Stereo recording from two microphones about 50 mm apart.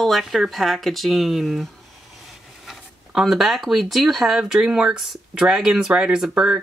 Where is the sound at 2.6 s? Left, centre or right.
Centre.